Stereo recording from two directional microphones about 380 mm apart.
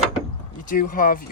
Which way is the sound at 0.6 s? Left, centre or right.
Left.